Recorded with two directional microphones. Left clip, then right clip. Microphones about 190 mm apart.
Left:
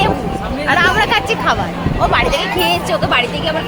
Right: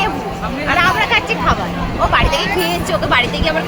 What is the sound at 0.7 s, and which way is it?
Speech, 40° left (ahead or behind).